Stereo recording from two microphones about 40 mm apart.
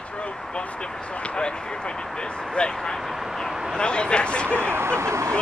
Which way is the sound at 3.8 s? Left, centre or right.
Left.